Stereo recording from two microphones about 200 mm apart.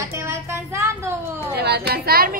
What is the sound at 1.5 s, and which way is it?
Speech, 55° right (ahead or behind).